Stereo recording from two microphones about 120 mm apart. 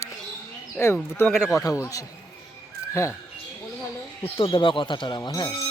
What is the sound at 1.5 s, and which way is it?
Speech, 25° left (ahead or behind).